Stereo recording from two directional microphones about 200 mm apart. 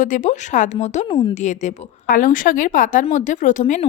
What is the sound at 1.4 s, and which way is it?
A woman's voice, 35° left (ahead or behind).